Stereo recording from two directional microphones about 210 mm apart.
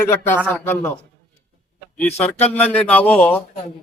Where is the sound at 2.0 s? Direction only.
10° left (ahead or behind).